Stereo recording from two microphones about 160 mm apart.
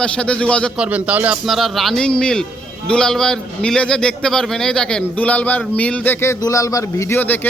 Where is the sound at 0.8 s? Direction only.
10° right (ahead or behind).